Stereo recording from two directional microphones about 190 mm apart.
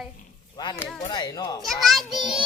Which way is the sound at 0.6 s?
20° left (ahead or behind).